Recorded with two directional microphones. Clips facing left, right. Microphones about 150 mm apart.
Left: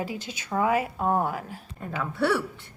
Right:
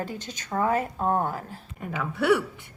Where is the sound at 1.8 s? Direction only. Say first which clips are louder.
Right 1 dB; centre (ahead or behind).